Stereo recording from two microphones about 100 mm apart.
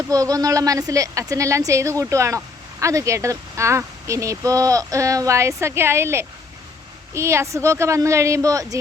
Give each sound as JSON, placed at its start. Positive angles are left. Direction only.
{"t": 0.1, "sound": "a woman's voice", "side_deg": -40}